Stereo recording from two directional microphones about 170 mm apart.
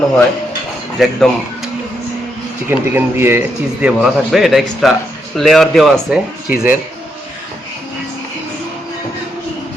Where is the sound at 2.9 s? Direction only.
15° right (ahead or behind).